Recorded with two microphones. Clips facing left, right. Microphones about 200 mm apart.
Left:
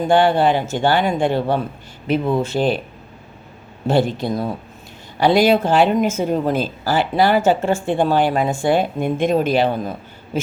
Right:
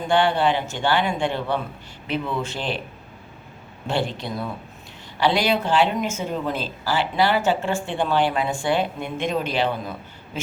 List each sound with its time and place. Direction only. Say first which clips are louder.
0.1 s speech: left 4 dB; 40° left (ahead or behind)
3.8 s speech: left 8 dB; 40° left (ahead or behind)